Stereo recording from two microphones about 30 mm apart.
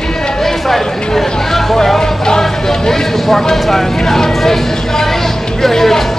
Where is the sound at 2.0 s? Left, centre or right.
Centre.